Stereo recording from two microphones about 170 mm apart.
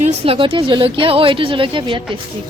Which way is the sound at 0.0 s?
30° right (ahead or behind).